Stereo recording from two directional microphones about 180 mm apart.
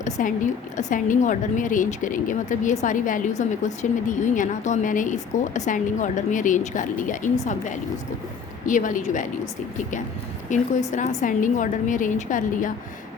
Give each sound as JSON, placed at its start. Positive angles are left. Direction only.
{"t": 0.0, "sound": "a woman's voice", "side_deg": 45}
{"t": 10.5, "sound": "a woman's voice", "side_deg": 45}